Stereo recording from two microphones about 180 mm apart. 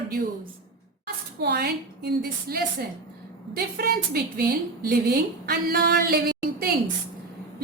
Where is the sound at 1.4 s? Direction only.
65° right (ahead or behind).